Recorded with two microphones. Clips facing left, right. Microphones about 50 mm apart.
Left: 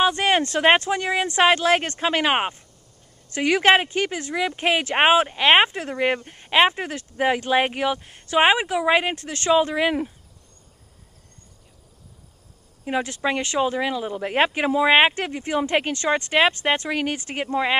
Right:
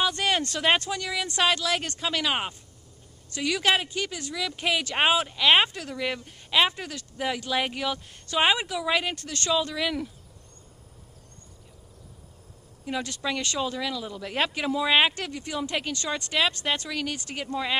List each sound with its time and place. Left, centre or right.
0.0 s speech: left
12.8 s speech: left